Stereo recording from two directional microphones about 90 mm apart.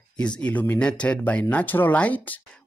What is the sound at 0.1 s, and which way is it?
Speech, 10° left (ahead or behind).